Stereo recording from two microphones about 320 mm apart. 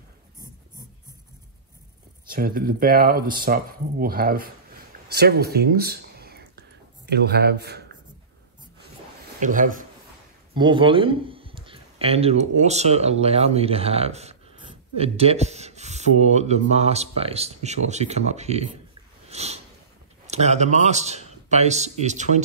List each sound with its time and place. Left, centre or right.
2.2 s speech: right
5.0 s a sound: right
7.1 s a man's voice: right
9.4 s speech: right
19.2 s snort: centre
20.2 s speech: right